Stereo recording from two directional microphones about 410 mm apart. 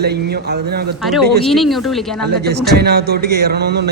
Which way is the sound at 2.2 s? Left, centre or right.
Right.